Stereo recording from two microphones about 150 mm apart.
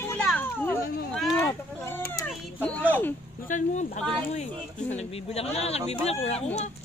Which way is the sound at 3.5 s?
55° left (ahead or behind).